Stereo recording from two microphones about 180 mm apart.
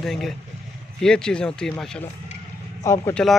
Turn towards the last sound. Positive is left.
turn(degrees=20)  # may be behind; listen again after turning